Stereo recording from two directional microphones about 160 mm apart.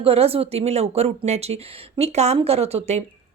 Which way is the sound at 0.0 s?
40° right (ahead or behind).